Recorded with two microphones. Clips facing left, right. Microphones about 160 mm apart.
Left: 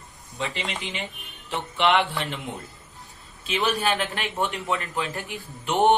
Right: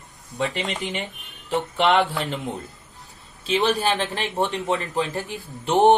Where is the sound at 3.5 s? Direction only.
30° right (ahead or behind).